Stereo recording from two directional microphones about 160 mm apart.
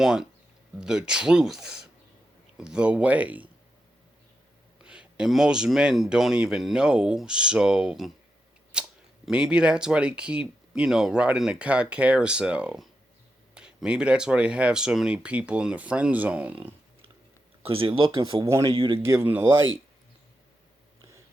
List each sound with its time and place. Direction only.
0.0 s speech: 5° right (ahead or behind)
4.8 s speech: 5° right (ahead or behind)
17.6 s speech: 35° right (ahead or behind)
19.0 s speech: 15° right (ahead or behind)